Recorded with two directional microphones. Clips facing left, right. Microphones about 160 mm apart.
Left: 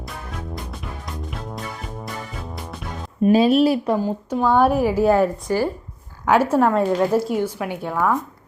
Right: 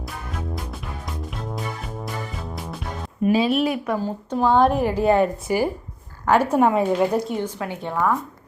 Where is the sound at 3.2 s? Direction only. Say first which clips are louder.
Left 4 dB; 40° left (ahead or behind).